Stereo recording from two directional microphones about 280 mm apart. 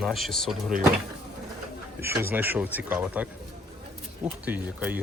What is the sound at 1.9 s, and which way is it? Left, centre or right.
Speech, centre.